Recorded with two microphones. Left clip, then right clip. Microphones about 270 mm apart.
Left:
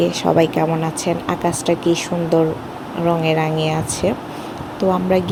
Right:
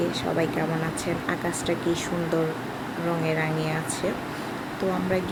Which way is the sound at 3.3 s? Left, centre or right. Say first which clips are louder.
Left 8 dB; left.